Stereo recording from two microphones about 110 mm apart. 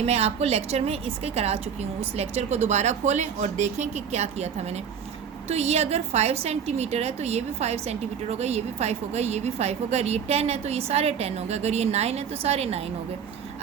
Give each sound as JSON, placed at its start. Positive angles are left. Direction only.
{"t": 0.0, "sound": "a woman's voice", "side_deg": -75}
{"t": 5.5, "sound": "a woman's voice", "side_deg": -75}